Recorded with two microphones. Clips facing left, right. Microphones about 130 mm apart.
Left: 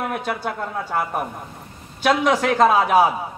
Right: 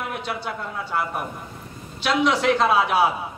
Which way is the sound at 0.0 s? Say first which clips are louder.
Left 4 dB; 50° left (ahead or behind).